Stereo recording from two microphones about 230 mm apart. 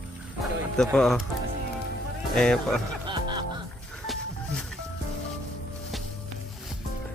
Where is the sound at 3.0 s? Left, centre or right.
Centre.